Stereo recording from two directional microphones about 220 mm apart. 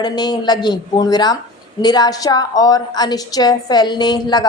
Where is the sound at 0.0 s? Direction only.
20° left (ahead or behind).